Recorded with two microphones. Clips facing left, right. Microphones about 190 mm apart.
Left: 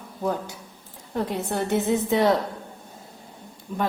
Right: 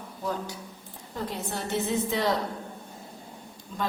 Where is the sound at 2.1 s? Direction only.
60° left (ahead or behind).